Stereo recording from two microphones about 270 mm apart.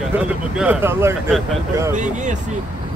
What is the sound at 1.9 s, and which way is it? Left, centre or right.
Speech, right.